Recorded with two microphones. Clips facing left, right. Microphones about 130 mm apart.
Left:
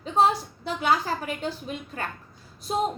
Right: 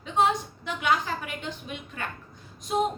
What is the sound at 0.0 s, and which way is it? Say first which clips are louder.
A woman's voice: left 2 dB; 35° left (ahead or behind).